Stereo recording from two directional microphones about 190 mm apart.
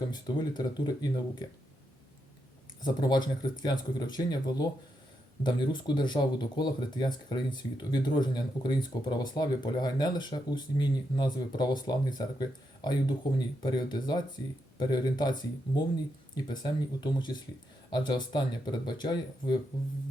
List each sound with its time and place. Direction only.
0.1 s speech: 25° left (ahead or behind)
2.8 s speech: 20° left (ahead or behind)